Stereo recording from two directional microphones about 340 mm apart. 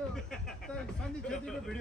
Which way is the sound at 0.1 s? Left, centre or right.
Centre.